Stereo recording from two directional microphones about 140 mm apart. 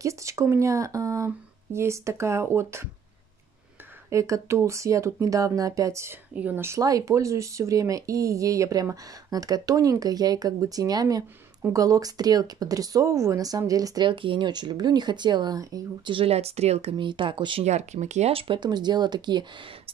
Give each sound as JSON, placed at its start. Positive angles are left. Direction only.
{"t": 0.0, "sound": "speech", "side_deg": -20}
{"t": 4.1, "sound": "speech", "side_deg": -20}
{"t": 16.2, "sound": "speech", "side_deg": -45}
{"t": 16.9, "sound": "speech", "side_deg": -35}
{"t": 17.6, "sound": "speech", "side_deg": -55}